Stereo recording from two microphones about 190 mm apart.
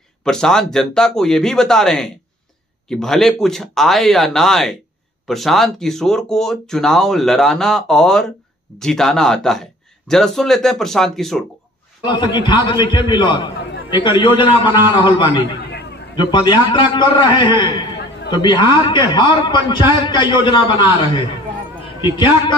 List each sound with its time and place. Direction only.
0.2 s speech: 5° left (ahead or behind)
12.0 s a man's voice: 25° left (ahead or behind)